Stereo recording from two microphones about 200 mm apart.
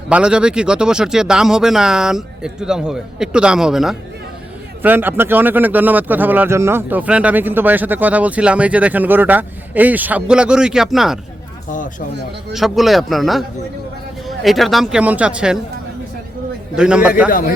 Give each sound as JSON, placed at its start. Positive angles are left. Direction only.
{"t": 0.1, "sound": "speech", "side_deg": -5}
{"t": 11.7, "sound": "speech", "side_deg": 40}
{"t": 12.5, "sound": "speech", "side_deg": 0}
{"t": 16.7, "sound": "speech", "side_deg": -5}
{"t": 17.2, "sound": "speech", "side_deg": 45}